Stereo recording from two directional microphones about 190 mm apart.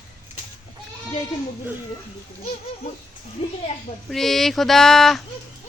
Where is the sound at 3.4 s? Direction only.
30° left (ahead or behind).